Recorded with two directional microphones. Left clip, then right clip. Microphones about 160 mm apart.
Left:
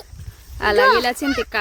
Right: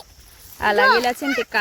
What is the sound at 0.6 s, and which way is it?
Speech, 30° left (ahead or behind).